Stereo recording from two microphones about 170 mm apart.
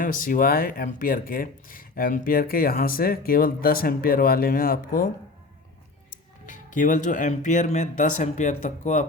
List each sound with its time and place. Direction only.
0.0 s speech: 55° left (ahead or behind)
6.4 s speech: 50° left (ahead or behind)